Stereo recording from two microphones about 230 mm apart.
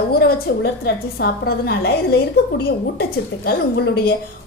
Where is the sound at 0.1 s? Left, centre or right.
Left.